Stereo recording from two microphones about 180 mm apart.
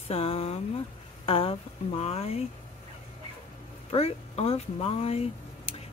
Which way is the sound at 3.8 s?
35° left (ahead or behind).